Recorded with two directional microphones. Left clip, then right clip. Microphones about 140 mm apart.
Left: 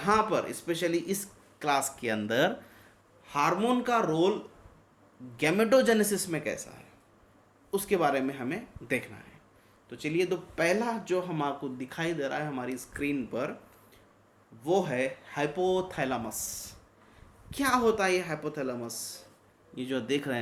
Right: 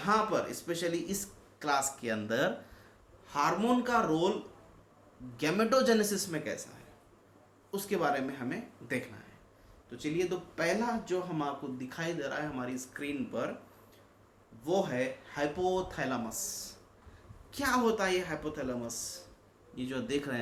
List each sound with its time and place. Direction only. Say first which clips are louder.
0.0 s speech: left 3 dB; 60° left (ahead or behind)
5.4 s speech: left 4 dB; 50° left (ahead or behind)
7.7 s speech: left 5 dB; 55° left (ahead or behind)
14.6 s speech: left 3 dB; 60° left (ahead or behind)